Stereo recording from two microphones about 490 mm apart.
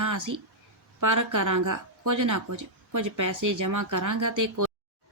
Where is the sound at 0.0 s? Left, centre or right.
Right.